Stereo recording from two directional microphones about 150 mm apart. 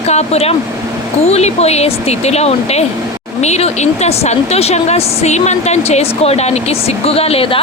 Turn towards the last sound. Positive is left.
turn(degrees=40)  # may be behind; listen again after turning